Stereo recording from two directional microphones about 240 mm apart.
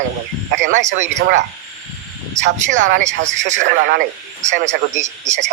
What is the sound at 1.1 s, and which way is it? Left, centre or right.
Speech, right.